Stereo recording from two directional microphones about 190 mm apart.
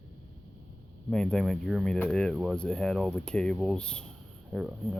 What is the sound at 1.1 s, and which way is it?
Speech, 5° left (ahead or behind).